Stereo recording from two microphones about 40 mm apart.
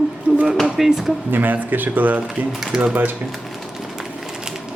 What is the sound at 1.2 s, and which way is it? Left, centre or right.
Speech, right.